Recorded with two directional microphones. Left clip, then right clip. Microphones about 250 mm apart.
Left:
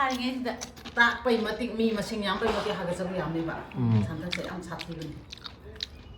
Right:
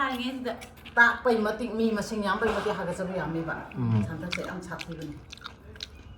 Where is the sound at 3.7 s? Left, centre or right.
Centre.